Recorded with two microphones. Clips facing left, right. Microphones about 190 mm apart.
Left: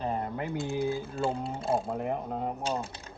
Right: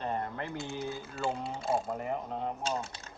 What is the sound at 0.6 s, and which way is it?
Speech, 55° left (ahead or behind).